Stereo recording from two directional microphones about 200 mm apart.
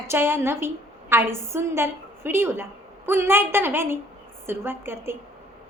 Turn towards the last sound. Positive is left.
turn(degrees=-10)  # may be behind; listen again after turning